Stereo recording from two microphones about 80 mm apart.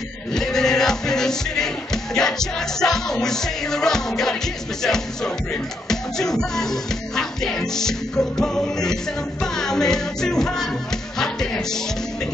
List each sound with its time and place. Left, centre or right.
0.3 s music: centre